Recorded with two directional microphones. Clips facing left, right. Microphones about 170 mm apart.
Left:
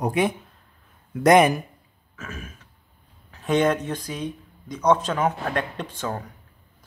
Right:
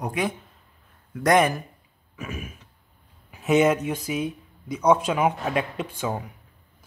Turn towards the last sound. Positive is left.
turn(degrees=-10)  # may be behind; listen again after turning